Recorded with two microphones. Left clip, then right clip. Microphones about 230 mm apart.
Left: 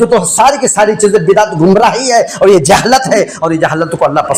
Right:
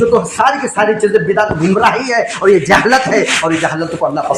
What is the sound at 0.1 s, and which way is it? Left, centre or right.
A man's voice, left.